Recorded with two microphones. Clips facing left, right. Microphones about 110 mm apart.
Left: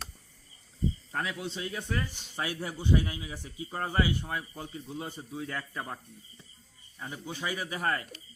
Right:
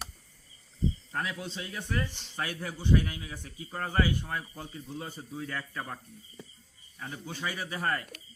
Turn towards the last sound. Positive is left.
turn(degrees=10)  # may be behind; listen again after turning